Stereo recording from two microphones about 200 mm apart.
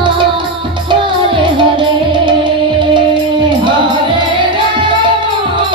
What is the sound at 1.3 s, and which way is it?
Music, 25° right (ahead or behind).